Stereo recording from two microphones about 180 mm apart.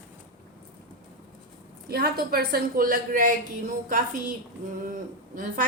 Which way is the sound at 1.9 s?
60° right (ahead or behind).